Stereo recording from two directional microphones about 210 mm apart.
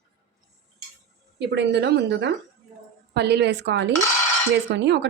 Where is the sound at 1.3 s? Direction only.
55° right (ahead or behind).